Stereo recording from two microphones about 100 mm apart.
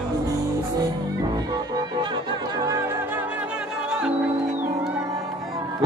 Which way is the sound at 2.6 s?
30° right (ahead or behind).